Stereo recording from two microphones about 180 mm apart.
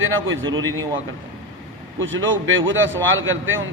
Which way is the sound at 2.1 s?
90° right.